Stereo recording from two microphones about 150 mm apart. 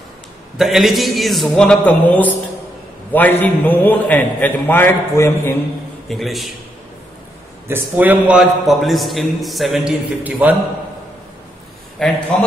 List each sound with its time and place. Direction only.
0.6 s a man's voice: centre (ahead or behind); by 5.6 s 15° left (ahead or behind)
6.0 s a man's voice: centre (ahead or behind)
7.6 s a man's voice: 15° right (ahead or behind)
12.0 s a man's voice: 10° left (ahead or behind)